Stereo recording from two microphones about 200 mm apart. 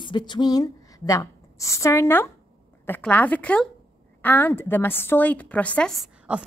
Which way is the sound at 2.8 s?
10° left (ahead or behind).